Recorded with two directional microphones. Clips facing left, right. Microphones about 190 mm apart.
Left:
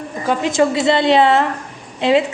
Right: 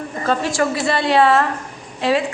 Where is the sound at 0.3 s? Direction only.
20° left (ahead or behind).